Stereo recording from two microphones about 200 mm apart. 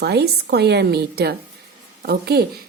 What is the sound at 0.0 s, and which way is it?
A woman's voice, 55° right (ahead or behind).